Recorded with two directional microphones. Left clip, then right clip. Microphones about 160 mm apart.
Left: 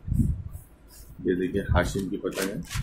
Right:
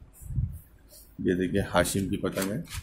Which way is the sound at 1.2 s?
70° right (ahead or behind).